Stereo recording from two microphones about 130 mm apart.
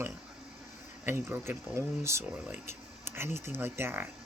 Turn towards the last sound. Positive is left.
turn(degrees=-20)  # may be behind; listen again after turning